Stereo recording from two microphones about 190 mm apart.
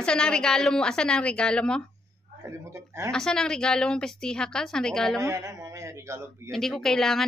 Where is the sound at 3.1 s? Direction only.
5° left (ahead or behind).